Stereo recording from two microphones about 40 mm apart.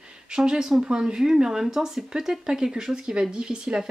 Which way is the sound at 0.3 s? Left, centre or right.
Centre.